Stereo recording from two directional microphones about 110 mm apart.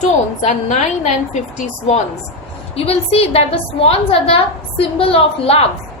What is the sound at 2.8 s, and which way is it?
A woman's voice, 65° left (ahead or behind).